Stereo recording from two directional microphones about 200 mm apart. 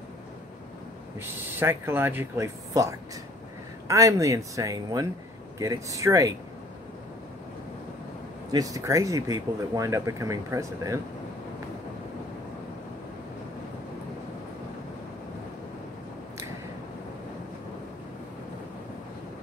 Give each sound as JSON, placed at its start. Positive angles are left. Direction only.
{"t": 1.2, "sound": "speech", "side_deg": -10}
{"t": 8.5, "sound": "speech", "side_deg": -20}